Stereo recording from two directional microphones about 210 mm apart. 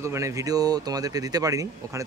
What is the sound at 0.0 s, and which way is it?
Speech, 15° right (ahead or behind).